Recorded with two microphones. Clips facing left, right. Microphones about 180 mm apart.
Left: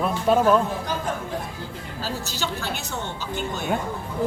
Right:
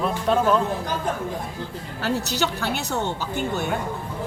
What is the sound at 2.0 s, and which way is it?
A woman's voice, 65° right (ahead or behind).